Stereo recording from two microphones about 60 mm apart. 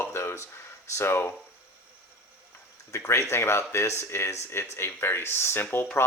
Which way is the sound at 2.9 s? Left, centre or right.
Left.